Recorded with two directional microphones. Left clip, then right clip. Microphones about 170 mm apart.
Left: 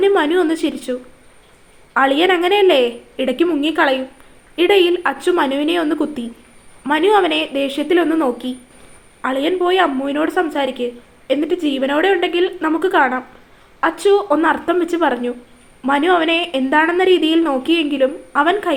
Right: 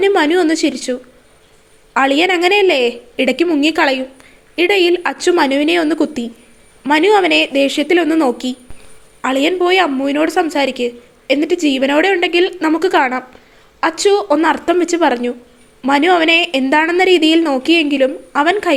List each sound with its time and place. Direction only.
0.0 s a woman's voice: 35° right (ahead or behind)